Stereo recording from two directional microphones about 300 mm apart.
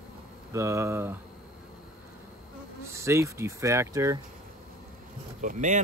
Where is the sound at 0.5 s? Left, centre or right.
Centre.